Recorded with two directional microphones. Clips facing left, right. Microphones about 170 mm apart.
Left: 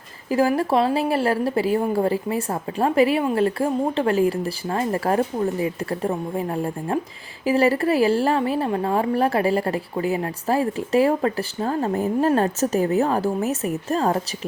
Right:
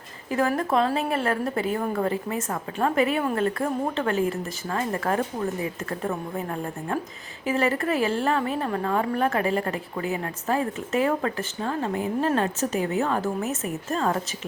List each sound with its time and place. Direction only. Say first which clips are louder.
0.3 s a woman's voice: left 4 dB; 30° left (ahead or behind)